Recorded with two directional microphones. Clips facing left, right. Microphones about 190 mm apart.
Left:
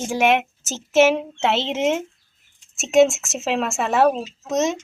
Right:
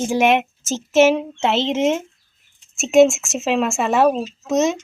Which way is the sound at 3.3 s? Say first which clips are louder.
Right 4 dB; 5° left (ahead or behind).